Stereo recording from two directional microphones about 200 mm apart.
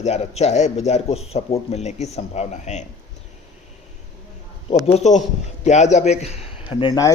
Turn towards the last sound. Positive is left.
turn(degrees=20)  # may be behind; listen again after turning